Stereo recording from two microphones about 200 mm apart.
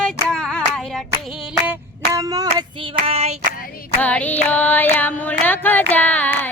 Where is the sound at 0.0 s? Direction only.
5° left (ahead or behind).